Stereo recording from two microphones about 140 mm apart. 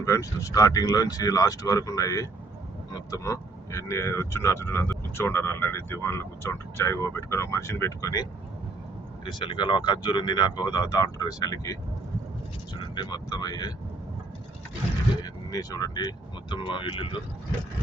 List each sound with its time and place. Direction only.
0.0 s speech: 20° left (ahead or behind)
9.2 s speech: 35° left (ahead or behind)
15.2 s speech: 30° left (ahead or behind)